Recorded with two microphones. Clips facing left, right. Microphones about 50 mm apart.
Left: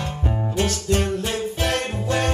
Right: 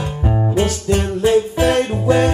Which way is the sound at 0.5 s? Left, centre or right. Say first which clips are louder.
Right 3 dB; centre.